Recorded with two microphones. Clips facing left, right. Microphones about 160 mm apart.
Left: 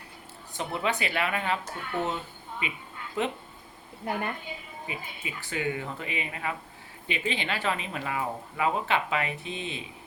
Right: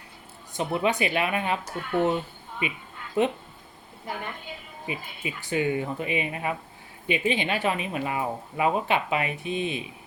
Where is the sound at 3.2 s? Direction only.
20° right (ahead or behind).